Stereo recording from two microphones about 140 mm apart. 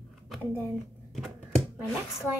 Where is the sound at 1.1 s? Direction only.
Centre (ahead or behind).